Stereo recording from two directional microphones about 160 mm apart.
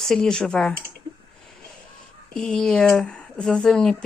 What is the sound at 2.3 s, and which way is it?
Speech, 5° left (ahead or behind).